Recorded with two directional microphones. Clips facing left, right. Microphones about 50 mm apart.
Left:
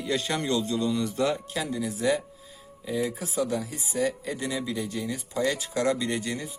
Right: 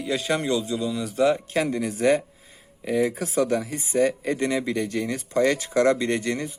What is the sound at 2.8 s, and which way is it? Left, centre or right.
Speech, right.